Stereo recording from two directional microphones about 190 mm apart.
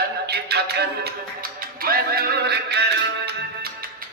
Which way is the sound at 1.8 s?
55° right (ahead or behind).